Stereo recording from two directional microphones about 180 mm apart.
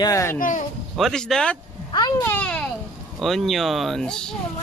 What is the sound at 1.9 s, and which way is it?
Speech, 25° left (ahead or behind).